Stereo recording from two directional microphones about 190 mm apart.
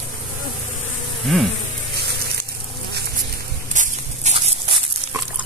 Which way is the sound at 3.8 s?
35° right (ahead or behind).